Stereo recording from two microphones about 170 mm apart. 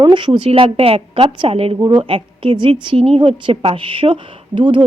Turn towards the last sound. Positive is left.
turn(degrees=-30)  # may be behind; listen again after turning